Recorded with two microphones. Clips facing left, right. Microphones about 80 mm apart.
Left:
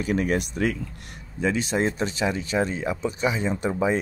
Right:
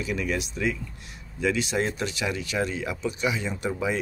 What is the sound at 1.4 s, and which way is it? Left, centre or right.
Speech, left.